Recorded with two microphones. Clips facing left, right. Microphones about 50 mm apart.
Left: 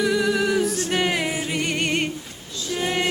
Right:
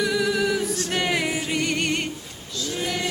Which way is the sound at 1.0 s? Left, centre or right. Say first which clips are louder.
Left 1 dB; centre.